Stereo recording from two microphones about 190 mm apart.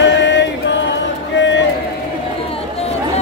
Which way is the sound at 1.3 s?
70° left (ahead or behind).